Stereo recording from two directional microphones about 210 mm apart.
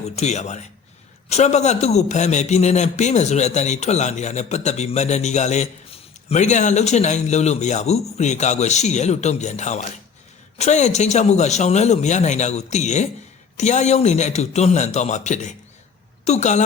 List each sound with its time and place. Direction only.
0.0 s a woman's voice: 30° left (ahead or behind)